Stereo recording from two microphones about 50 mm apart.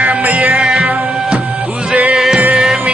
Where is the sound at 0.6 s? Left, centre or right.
Centre.